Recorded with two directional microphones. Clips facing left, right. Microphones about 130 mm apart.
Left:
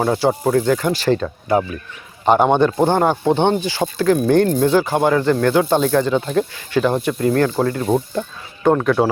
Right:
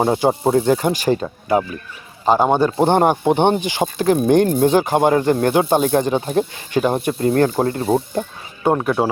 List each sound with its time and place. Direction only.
0.0 s speech: 20° right (ahead or behind)
2.4 s speech: 10° right (ahead or behind)
2.7 s speech: 20° right (ahead or behind)
7.1 s speech: 30° right (ahead or behind)
8.6 s speech: 15° right (ahead or behind)